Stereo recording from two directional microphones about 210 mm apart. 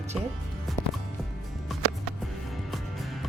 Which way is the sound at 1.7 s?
Centre (ahead or behind).